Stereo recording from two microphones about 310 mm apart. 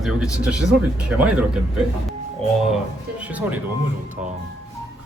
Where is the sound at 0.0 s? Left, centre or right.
Centre.